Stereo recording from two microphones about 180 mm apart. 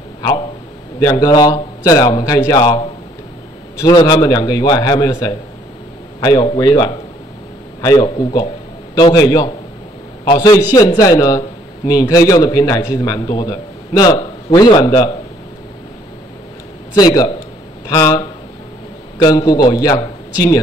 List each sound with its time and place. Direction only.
0.9 s a man's voice: 20° left (ahead or behind)
16.9 s a man's voice: 20° left (ahead or behind)